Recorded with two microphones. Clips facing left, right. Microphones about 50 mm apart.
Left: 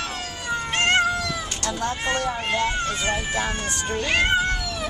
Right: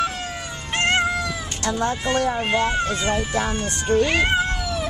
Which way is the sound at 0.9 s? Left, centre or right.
Centre.